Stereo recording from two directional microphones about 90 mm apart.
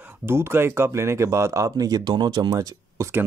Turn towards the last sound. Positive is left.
turn(degrees=-35)  # may be behind; listen again after turning